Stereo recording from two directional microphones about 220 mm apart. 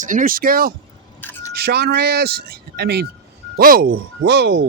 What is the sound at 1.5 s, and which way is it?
Speech, 45° right (ahead or behind).